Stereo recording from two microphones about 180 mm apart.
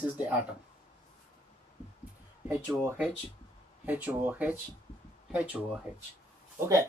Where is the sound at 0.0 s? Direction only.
10° right (ahead or behind).